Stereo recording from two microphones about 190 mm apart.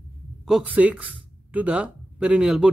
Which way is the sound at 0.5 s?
5° right (ahead or behind).